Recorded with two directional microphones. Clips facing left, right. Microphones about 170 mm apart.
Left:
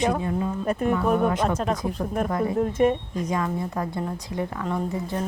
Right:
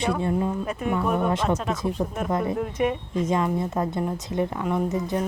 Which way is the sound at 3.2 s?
25° right (ahead or behind).